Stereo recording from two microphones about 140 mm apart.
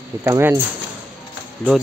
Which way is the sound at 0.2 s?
15° right (ahead or behind).